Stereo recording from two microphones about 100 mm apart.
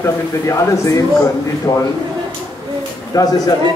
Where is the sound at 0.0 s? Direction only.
30° left (ahead or behind).